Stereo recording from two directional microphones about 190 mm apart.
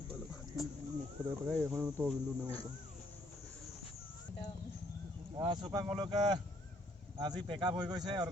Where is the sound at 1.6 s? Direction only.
5° right (ahead or behind).